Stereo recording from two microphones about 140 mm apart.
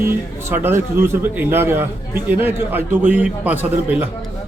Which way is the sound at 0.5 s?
15° right (ahead or behind).